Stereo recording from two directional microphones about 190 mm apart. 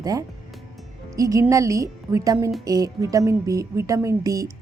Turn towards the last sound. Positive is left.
turn(degrees=-15)  # may be behind; listen again after turning